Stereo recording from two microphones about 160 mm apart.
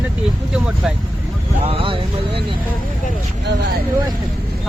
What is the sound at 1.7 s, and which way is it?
Speech, 35° right (ahead or behind).